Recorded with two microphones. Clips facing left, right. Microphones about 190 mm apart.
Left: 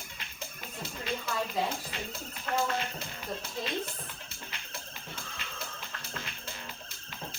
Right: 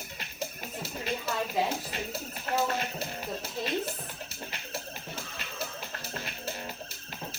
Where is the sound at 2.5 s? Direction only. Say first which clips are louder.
Right 2 dB; 10° right (ahead or behind).